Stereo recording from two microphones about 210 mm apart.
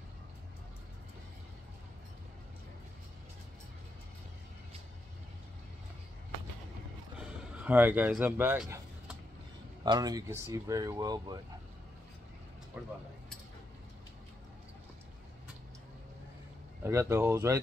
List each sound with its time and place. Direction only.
7.2 s a sound: 5° right (ahead or behind)
9.8 s speech: 20° right (ahead or behind)
12.7 s speech: 10° right (ahead or behind)
16.8 s speech: 15° right (ahead or behind)